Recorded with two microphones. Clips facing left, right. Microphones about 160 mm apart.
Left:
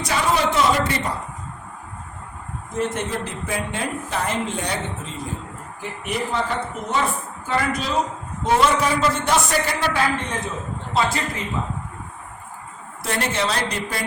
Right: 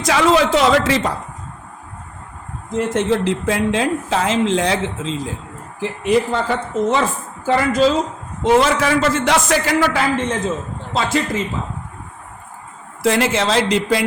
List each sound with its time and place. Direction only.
0.0 s speech: 90° right
2.7 s speech: 90° right
13.0 s speech: 90° right